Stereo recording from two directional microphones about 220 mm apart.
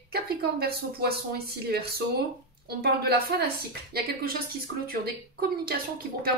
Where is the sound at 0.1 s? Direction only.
45° right (ahead or behind).